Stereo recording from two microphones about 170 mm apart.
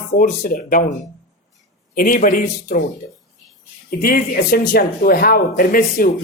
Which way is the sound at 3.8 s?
60° left (ahead or behind).